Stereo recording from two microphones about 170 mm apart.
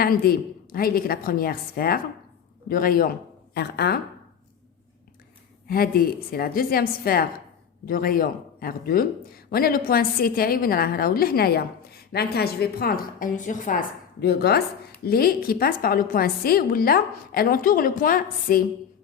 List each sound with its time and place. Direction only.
0.0 s speech: 60° left (ahead or behind)
5.6 s a woman's voice: 60° left (ahead or behind)